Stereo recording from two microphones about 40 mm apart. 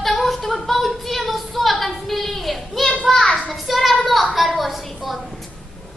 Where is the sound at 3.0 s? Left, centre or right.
Centre.